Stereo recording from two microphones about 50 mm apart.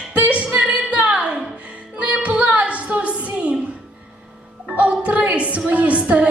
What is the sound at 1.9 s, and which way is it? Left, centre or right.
Music, right.